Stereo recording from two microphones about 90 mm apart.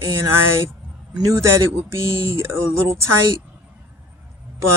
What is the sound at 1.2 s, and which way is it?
Speech, 30° right (ahead or behind).